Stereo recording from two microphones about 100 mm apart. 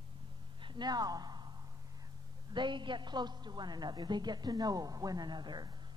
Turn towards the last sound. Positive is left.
turn(degrees=-45)  # may be behind; listen again after turning